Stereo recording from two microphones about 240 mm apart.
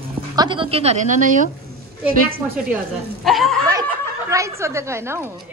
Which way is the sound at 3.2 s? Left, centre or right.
Centre.